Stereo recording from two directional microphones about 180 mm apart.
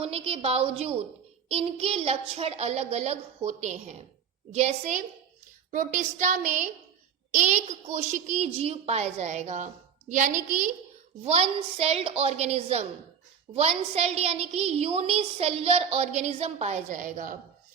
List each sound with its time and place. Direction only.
0.0 s a woman's voice: 35° right (ahead or behind)
5.7 s a sound: 45° right (ahead or behind)
7.3 s a woman's voice: 40° right (ahead or behind)